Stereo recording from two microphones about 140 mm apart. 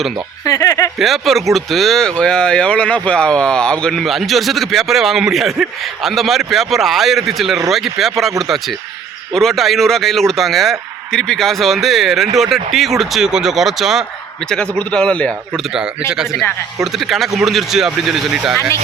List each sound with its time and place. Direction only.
0.4 s speech: 25° left (ahead or behind)
0.9 s speech: centre (ahead or behind)
14.5 s a man's voice: 10° left (ahead or behind)
15.7 s speech: 5° right (ahead or behind)